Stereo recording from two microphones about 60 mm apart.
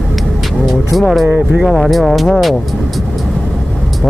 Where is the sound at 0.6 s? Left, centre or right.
Centre.